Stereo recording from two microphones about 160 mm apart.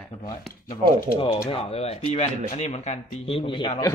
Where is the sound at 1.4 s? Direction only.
40° left (ahead or behind).